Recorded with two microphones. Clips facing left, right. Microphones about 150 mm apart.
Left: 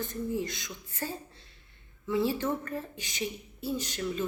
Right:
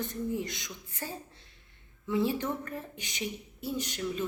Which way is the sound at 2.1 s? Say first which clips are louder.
Left 1 dB; 15° right (ahead or behind).